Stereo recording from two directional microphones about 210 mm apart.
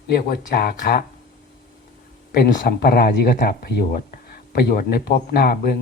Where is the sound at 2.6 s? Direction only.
45° left (ahead or behind).